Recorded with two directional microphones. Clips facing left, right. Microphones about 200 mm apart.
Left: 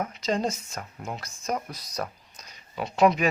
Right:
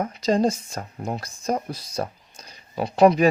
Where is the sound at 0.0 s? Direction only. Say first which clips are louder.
Right 6 dB; 35° right (ahead or behind).